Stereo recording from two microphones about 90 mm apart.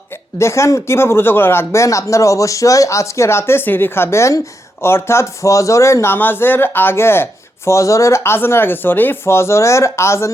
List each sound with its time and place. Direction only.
0.3 s speech: 30° left (ahead or behind)